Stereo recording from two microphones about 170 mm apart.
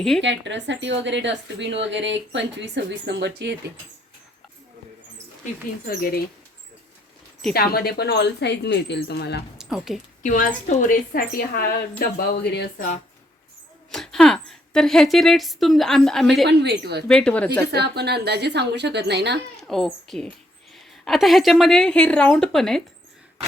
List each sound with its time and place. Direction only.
0.2 s speech: 90° right
5.8 s speech: 60° left (ahead or behind)
7.5 s speech: 65° left (ahead or behind)
9.6 s speech: centre (ahead or behind)
10.2 s speech: 50° left (ahead or behind); by 12.9 s 80° left
13.9 s a woman's voice: 5° left (ahead or behind)
16.5 s a woman's voice: 80° right
17.1 s a woman's voice: 5° left (ahead or behind)
17.7 s speech: 75° right (ahead or behind)
19.6 s a woman's voice: centre (ahead or behind)